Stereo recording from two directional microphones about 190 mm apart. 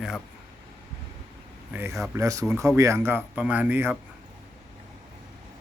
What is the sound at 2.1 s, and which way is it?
Speech, 15° right (ahead or behind).